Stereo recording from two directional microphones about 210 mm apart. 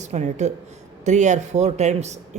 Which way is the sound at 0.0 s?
35° right (ahead or behind).